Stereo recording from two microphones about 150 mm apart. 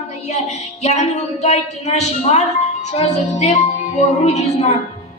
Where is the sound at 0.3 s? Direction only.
50° left (ahead or behind).